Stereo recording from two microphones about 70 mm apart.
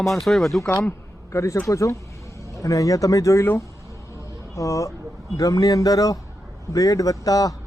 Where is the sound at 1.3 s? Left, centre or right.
Left.